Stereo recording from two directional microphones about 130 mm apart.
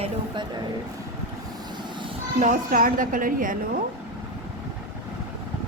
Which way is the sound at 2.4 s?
90° right.